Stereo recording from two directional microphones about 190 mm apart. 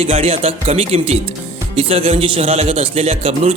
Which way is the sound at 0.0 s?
30° right (ahead or behind).